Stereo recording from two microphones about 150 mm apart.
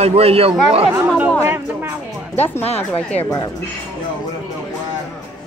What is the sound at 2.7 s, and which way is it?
Speech, 10° left (ahead or behind).